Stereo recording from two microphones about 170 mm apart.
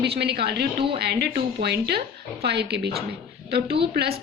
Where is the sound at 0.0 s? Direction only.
75° right (ahead or behind).